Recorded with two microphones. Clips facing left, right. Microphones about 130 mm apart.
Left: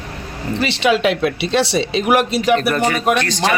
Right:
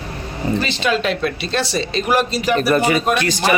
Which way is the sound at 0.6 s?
75° left (ahead or behind).